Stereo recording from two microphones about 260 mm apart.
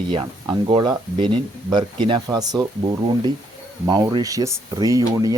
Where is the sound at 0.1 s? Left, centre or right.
Centre.